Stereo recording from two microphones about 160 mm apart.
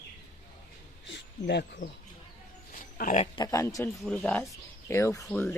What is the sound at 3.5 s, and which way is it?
Speech, 20° left (ahead or behind).